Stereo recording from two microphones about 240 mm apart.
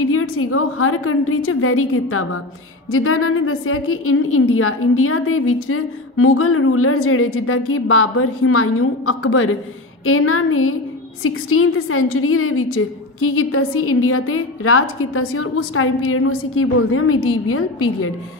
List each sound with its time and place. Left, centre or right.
0.0 s a woman's voice: left